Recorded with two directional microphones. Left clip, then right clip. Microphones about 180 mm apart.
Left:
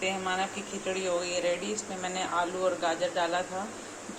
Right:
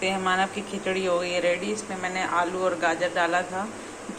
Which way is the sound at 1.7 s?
15° left (ahead or behind).